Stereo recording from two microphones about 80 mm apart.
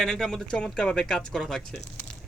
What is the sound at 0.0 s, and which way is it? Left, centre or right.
Speech, centre.